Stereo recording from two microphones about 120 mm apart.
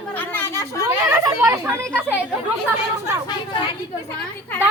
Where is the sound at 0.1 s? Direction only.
15° left (ahead or behind).